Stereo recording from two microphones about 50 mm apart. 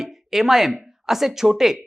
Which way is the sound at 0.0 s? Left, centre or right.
Centre.